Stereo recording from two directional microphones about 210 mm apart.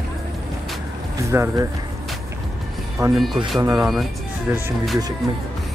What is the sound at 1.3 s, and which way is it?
Speech, 10° right (ahead or behind).